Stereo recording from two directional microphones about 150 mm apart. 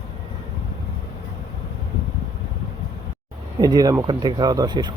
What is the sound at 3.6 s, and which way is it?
Speech, 25° right (ahead or behind).